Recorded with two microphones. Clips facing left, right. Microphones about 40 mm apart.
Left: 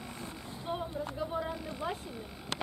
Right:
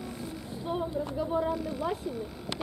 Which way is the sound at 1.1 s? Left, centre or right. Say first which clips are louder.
Right 7 dB; centre.